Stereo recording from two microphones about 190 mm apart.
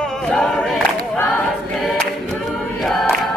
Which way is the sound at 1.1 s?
5° left (ahead or behind).